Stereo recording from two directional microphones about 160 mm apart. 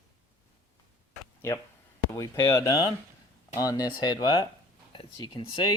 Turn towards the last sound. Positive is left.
turn(degrees=30)  # may be behind; listen again after turning